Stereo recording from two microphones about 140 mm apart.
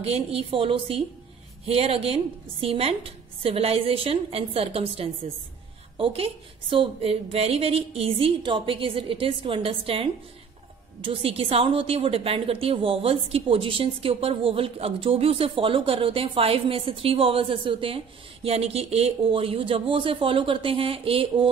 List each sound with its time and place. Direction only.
0.0 s a woman's voice: 45° right (ahead or behind)